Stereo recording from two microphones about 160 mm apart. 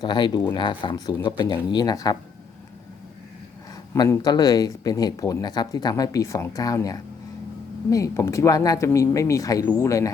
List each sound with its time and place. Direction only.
0.0 s speech: 30° left (ahead or behind)
3.9 s speech: 25° left (ahead or behind)